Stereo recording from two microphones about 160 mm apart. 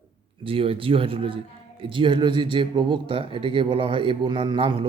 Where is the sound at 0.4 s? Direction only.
35° right (ahead or behind).